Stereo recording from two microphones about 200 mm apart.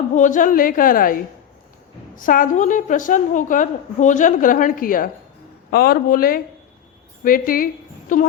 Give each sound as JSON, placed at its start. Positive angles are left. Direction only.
{"t": 0.1, "sound": "a woman's voice", "side_deg": 40}